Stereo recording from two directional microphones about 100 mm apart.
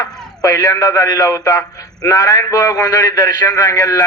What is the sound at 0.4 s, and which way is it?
A man's voice, 35° left (ahead or behind).